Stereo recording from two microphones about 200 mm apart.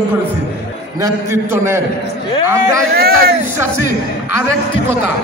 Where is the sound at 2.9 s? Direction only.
50° right (ahead or behind).